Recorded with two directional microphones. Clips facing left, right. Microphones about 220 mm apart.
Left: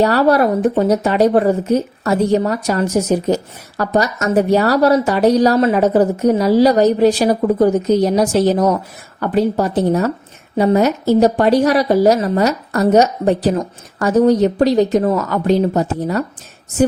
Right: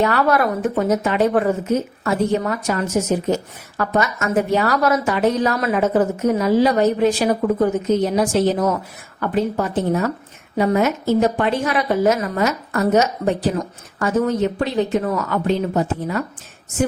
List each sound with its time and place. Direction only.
0.0 s speech: 35° left (ahead or behind)